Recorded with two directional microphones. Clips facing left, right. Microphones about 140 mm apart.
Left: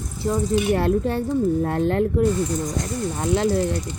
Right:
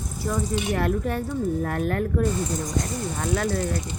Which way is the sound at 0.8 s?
30° left (ahead or behind).